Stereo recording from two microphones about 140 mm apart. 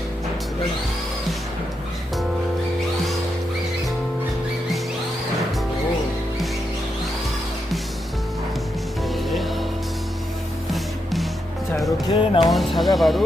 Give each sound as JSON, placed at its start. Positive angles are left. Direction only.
{"t": 9.1, "sound": "music", "side_deg": 0}
{"t": 10.7, "sound": "music", "side_deg": 0}
{"t": 12.1, "sound": "speech", "side_deg": 40}
{"t": 12.5, "sound": "speech", "side_deg": 0}